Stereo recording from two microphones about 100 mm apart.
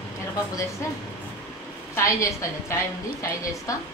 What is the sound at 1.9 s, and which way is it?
Speech, 30° left (ahead or behind).